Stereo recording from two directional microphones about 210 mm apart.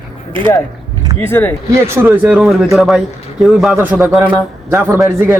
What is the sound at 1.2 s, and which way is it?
Speech, 10° left (ahead or behind).